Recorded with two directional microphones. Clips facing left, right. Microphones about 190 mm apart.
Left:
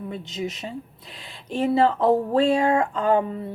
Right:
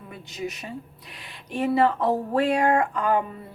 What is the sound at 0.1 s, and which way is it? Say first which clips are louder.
A woman's voice: right 1 dB; 25° left (ahead or behind).